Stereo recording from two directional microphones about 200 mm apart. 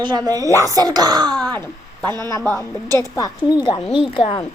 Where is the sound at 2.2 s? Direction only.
15° left (ahead or behind).